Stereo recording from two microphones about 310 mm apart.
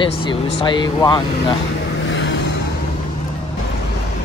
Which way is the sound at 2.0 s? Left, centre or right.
Left.